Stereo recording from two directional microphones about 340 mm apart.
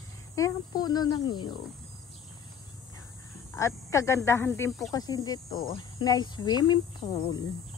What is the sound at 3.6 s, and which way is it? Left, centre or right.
Speech, centre.